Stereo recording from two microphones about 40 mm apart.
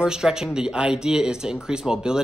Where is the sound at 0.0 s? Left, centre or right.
Centre.